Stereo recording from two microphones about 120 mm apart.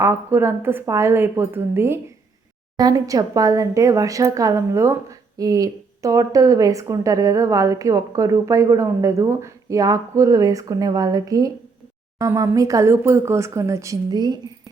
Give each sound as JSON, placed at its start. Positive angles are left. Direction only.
{"t": 0.0, "sound": "a woman's voice", "side_deg": -20}
{"t": 2.7, "sound": "a woman's voice", "side_deg": -30}